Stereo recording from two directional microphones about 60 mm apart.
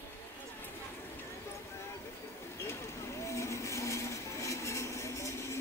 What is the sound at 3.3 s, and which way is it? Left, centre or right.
Vehicle, left.